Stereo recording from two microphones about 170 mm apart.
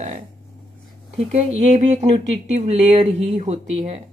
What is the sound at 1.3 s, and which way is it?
Speech, 40° right (ahead or behind).